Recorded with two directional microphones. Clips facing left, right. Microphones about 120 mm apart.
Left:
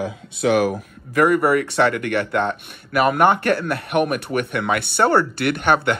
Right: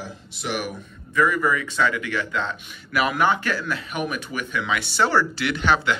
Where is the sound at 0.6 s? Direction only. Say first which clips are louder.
Left 10 dB; 80° left.